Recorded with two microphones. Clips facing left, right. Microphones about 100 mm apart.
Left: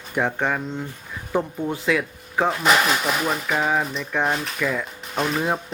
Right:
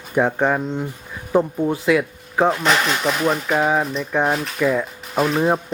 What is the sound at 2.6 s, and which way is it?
Speech, 5° left (ahead or behind).